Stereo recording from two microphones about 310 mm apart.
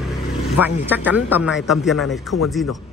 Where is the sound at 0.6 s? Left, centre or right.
Centre.